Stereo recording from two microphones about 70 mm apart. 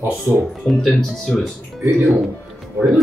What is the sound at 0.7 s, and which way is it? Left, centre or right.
Speech, centre.